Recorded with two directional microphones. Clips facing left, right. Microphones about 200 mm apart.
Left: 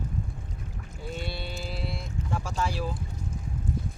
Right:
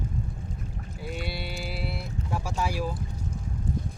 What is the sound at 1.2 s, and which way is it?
Speech, 10° right (ahead or behind).